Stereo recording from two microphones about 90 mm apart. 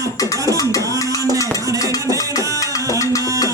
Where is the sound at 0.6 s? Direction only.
40° left (ahead or behind).